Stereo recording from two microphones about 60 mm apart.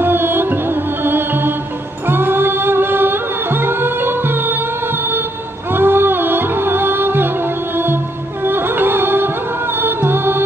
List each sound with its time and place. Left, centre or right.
0.0 s music: right